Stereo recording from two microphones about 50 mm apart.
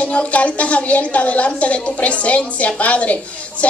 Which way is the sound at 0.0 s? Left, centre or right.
Left.